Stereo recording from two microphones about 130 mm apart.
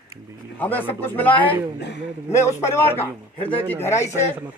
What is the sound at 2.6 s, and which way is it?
Speech, 20° left (ahead or behind).